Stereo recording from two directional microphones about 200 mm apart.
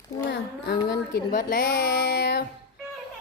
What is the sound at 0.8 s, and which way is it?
Speech, 45° left (ahead or behind).